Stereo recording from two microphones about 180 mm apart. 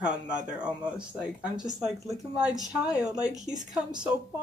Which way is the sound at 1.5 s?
20° right (ahead or behind).